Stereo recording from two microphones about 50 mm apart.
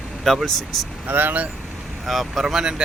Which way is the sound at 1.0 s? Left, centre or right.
Right.